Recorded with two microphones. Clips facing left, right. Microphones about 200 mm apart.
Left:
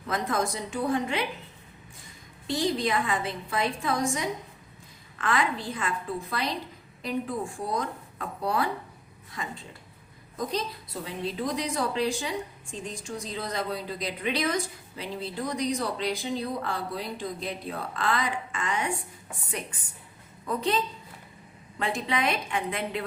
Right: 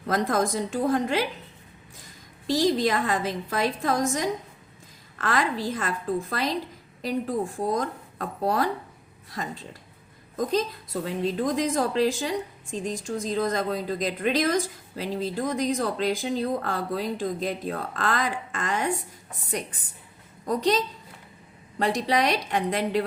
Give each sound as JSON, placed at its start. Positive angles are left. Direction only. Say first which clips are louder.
{"t": 0.0, "sound": "a woman's voice", "louder": "right 4 dB", "side_deg": -40}
{"t": 2.5, "sound": "a woman's voice", "louder": "right 4 dB", "side_deg": -40}